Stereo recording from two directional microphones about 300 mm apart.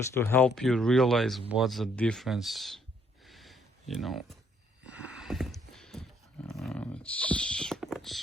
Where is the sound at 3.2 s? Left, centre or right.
Centre.